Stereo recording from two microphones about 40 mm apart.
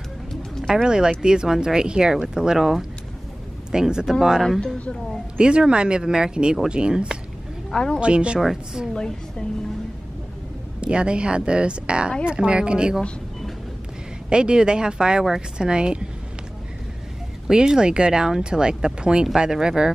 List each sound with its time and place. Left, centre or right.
0.8 s speech: centre
5.4 s speech: right
7.7 s a woman's voice: centre
8.0 s speech: right
8.9 s a woman's voice: centre
10.8 s speech: right
14.3 s speech: right
17.5 s speech: centre